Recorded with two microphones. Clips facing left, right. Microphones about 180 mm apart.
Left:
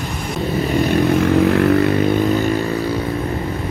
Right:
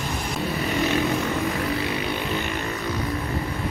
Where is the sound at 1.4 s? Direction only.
60° left (ahead or behind).